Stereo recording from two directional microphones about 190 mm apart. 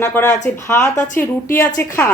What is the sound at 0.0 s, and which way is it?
A woman's voice, 15° left (ahead or behind).